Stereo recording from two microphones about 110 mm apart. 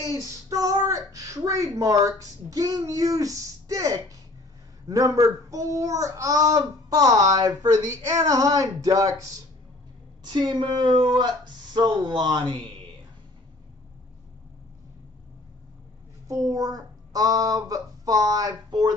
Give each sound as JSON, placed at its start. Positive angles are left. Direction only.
{"t": 0.1, "sound": "speech", "side_deg": -30}
{"t": 10.2, "sound": "speech", "side_deg": -40}
{"t": 16.3, "sound": "speech", "side_deg": -30}